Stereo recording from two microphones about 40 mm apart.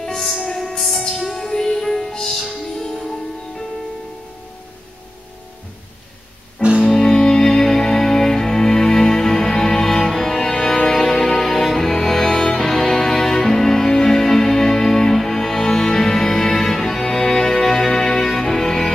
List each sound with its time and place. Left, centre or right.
0.0 s music: centre
6.6 s music: right
6.9 s music: centre